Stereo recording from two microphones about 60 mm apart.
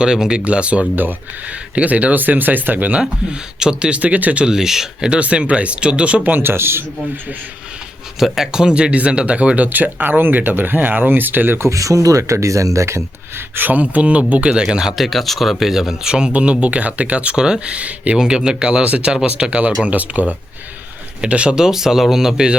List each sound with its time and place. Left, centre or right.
0.0 s speech: centre
3.6 s speech: centre
6.4 s speech: right
8.2 s speech: centre; by 11.6 s right
11.6 s speech: right
13.6 s speech: right; by 15.0 s centre
15.0 s speech: centre